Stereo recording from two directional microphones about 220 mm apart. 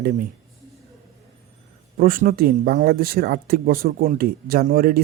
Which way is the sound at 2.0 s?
40° right (ahead or behind).